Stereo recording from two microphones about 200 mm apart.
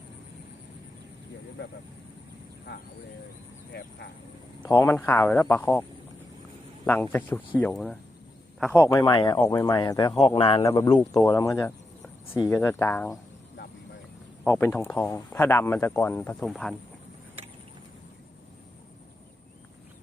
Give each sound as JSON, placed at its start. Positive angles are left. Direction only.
{"t": 2.7, "sound": "speech", "side_deg": 55}
{"t": 4.6, "sound": "speech", "side_deg": 15}
{"t": 6.8, "sound": "speech", "side_deg": 10}
{"t": 10.6, "sound": "speech", "side_deg": 15}
{"t": 14.4, "sound": "speech", "side_deg": 10}